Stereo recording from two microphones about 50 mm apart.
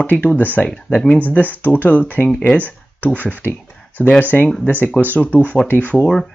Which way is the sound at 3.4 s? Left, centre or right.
Left.